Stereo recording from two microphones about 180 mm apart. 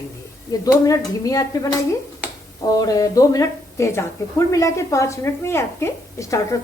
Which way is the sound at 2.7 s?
20° left (ahead or behind).